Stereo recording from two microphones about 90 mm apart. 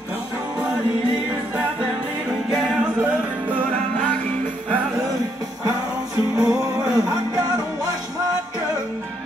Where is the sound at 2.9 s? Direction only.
20° right (ahead or behind).